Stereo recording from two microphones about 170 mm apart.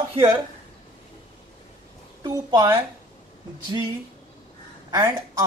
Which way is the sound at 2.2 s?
20° right (ahead or behind).